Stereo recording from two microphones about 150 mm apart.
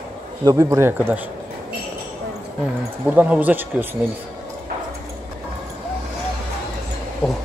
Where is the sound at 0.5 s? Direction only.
25° right (ahead or behind).